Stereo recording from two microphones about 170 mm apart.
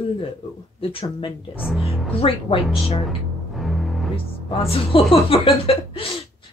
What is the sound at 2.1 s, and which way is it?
Speech, 30° left (ahead or behind).